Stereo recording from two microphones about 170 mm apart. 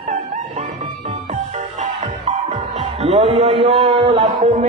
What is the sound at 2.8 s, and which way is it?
A man's voice, 40° right (ahead or behind).